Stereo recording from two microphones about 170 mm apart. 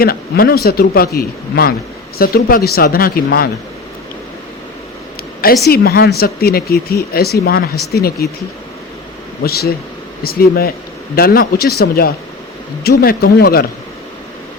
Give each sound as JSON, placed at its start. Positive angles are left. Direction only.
{"t": 0.0, "sound": "speech", "side_deg": 60}
{"t": 5.6, "sound": "speech", "side_deg": 65}
{"t": 9.4, "sound": "speech", "side_deg": 65}